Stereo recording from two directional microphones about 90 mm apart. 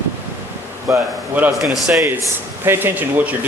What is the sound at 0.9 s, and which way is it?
Speech, 20° right (ahead or behind).